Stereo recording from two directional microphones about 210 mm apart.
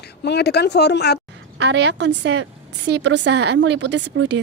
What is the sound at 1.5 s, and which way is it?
A woman's voice, 55° right (ahead or behind).